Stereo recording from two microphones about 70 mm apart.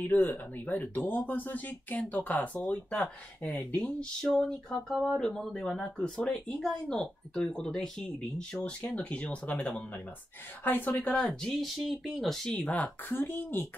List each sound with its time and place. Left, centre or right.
0.0 s speech: left; by 4.7 s centre
4.9 s speech: centre
5.2 s speech: centre
5.8 s speech: centre
8.8 s speech: left
11.1 s speech: centre
12.6 s speech: centre
13.1 s speech: left